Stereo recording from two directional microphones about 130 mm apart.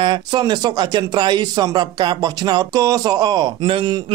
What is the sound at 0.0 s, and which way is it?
Speech, 35° right (ahead or behind).